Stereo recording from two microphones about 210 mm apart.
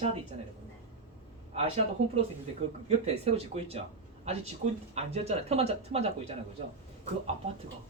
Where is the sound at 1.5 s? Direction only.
30° right (ahead or behind).